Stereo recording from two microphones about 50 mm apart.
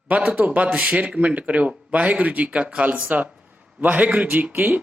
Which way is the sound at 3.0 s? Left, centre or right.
Right.